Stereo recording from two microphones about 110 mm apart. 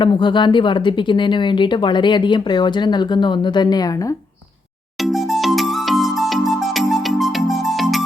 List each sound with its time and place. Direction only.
0.0 s speech: 45° left (ahead or behind)
5.0 s music: centre (ahead or behind)